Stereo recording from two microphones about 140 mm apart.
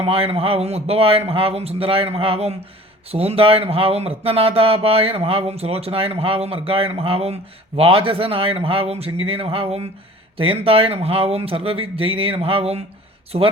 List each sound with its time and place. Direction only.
0.0 s speech: 45° right (ahead or behind)